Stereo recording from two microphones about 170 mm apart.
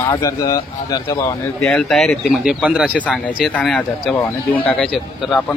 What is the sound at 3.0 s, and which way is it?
Speech, 10° left (ahead or behind).